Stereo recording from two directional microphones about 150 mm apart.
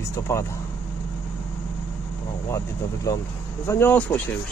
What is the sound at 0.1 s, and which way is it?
Speech, 20° left (ahead or behind).